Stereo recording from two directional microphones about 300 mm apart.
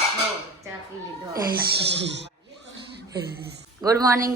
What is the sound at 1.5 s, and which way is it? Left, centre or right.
Speech, right.